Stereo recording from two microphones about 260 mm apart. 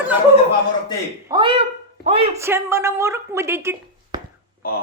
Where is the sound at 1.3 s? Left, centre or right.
Centre.